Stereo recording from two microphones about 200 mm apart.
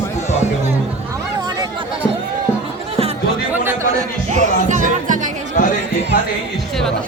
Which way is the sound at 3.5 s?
10° right (ahead or behind).